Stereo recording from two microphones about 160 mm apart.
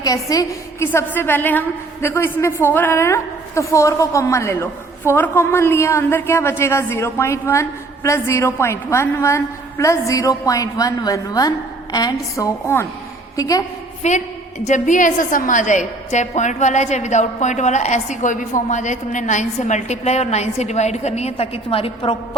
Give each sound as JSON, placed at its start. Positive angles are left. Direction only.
{"t": 0.0, "sound": "a woman's voice", "side_deg": 20}
{"t": 14.0, "sound": "a woman's voice", "side_deg": 45}